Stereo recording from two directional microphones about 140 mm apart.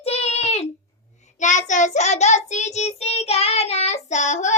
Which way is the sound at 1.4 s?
60° left (ahead or behind).